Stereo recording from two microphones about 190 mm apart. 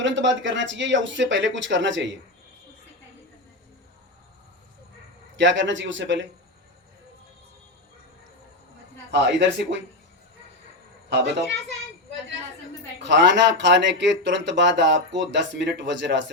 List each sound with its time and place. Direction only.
0.0 s speech: 75° right (ahead or behind)
5.4 s speech: 75° right (ahead or behind)
9.1 s speech: 65° right (ahead or behind)
11.1 s speech: 70° right (ahead or behind)
13.0 s speech: 70° right (ahead or behind)